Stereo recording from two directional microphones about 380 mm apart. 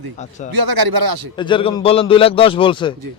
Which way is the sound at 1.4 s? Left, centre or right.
Centre.